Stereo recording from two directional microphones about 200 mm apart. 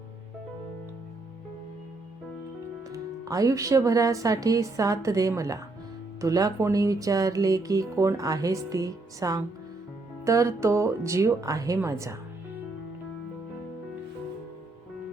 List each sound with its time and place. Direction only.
2.9 s speech: 15° right (ahead or behind)